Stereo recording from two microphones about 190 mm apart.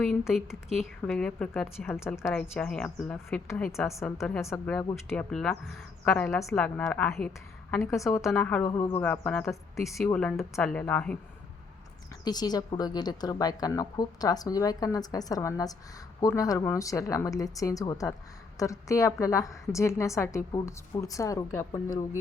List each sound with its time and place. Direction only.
0.0 s a woman's voice: centre (ahead or behind)
1.9 s a woman's voice: 15° left (ahead or behind)
6.6 s a woman's voice: 5° left (ahead or behind)
9.0 s a woman's voice: 5° left (ahead or behind)
12.2 s a woman's voice: 20° left (ahead or behind)